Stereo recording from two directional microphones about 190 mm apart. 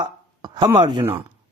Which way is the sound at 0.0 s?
20° right (ahead or behind).